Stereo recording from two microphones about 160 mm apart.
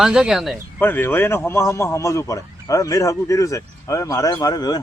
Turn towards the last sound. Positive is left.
turn(degrees=25)  # may be behind; listen again after turning